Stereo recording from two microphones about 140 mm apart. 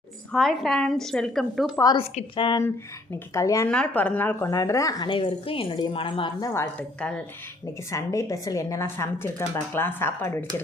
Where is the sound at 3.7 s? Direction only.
10° left (ahead or behind); by 6.3 s 35° left (ahead or behind).